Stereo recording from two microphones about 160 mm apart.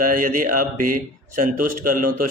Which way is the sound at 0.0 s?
60° right (ahead or behind).